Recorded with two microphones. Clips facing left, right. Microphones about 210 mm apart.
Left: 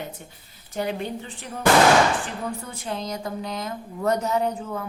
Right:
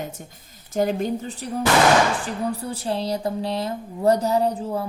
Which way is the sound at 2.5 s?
35° right (ahead or behind).